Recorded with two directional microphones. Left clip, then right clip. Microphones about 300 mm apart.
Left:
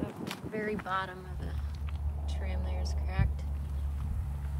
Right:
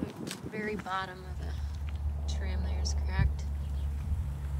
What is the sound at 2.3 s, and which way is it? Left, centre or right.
Speech, centre.